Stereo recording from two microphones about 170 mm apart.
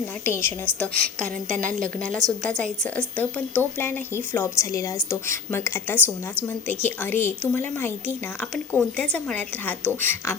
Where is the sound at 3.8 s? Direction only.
10° left (ahead or behind).